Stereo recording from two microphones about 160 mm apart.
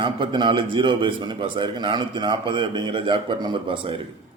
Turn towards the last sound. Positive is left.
turn(degrees=-30)  # may be behind; listen again after turning